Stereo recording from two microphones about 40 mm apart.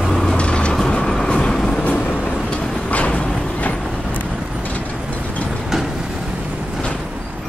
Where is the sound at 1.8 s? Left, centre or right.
Left.